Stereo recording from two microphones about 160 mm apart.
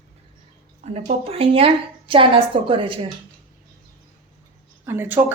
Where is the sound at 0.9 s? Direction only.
35° right (ahead or behind).